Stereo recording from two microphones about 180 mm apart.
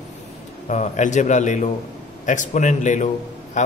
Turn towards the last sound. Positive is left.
turn(degrees=40)  # may be behind; listen again after turning